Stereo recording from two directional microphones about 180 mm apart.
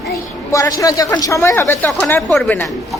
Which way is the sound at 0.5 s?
20° left (ahead or behind).